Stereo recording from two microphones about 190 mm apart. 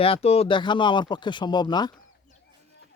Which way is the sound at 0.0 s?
30° left (ahead or behind).